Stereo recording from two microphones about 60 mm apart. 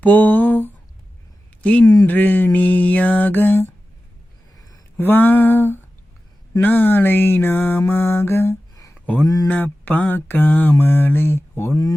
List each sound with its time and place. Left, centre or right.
0.0 s mantra: left
1.8 s speech: left
2.0 s mantra: left
4.5 s a sound: left
4.9 s mantra: left
9.0 s a sound: left
9.2 s speech: left
9.5 s mantra: left